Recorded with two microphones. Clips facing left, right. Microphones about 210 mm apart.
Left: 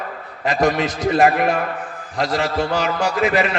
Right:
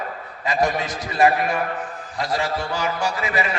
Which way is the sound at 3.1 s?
75° left (ahead or behind).